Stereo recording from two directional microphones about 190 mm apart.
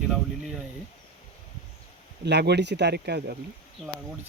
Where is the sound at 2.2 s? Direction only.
60° right (ahead or behind).